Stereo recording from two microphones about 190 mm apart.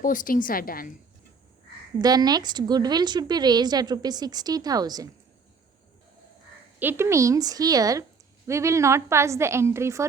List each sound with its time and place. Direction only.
0.0 s a woman's voice: 45° left (ahead or behind)
2.0 s a woman's voice: 20° right (ahead or behind)
6.7 s a woman's voice: 10° right (ahead or behind)